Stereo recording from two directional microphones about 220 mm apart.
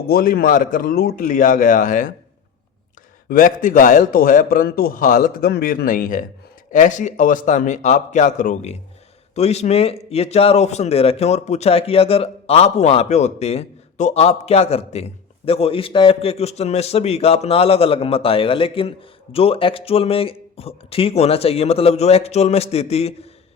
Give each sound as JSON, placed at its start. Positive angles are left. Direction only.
{"t": 0.1, "sound": "a man's voice", "side_deg": 40}
{"t": 3.2, "sound": "a man's voice", "side_deg": 40}